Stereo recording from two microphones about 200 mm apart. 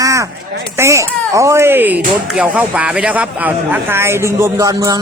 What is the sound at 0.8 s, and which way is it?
Speech, 15° right (ahead or behind).